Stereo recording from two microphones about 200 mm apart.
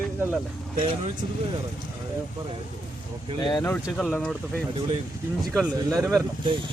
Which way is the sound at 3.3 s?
20° left (ahead or behind).